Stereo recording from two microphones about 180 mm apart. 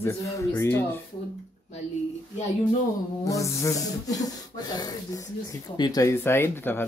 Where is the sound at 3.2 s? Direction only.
15° left (ahead or behind).